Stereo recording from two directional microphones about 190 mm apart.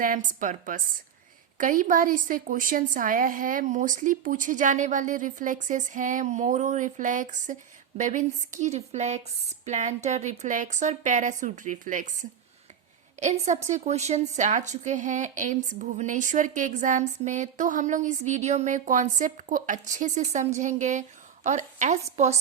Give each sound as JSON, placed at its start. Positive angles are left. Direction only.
{"t": 0.0, "sound": "a woman's voice", "side_deg": -45}